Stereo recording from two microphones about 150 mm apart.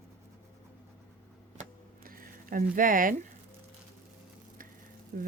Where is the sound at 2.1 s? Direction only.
70° right (ahead or behind).